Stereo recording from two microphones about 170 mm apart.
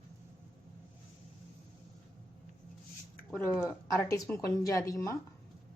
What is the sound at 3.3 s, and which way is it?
Speech, 5° left (ahead or behind).